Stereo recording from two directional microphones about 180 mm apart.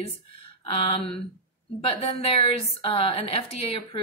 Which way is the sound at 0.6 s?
30° left (ahead or behind).